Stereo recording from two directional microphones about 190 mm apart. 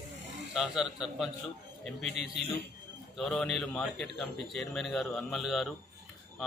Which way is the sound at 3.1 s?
Centre (ahead or behind).